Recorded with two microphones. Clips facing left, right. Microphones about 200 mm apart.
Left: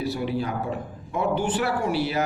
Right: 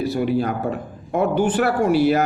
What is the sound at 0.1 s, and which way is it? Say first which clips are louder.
A man's voice: right 6 dB; 50° right (ahead or behind).